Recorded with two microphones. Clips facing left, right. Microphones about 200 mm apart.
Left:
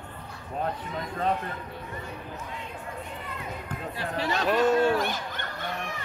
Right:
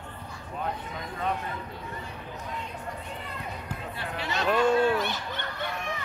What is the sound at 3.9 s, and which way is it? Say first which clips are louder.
Speech: left 6 dB; 35° left (ahead or behind).